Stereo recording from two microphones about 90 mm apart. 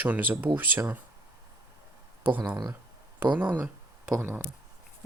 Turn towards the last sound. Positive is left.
turn(degrees=-25)  # may be behind; listen again after turning